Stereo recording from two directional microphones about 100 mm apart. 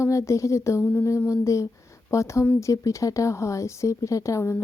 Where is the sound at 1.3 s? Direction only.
30° left (ahead or behind).